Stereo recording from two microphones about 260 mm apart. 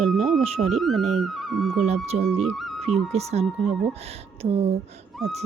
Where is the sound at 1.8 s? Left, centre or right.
Right.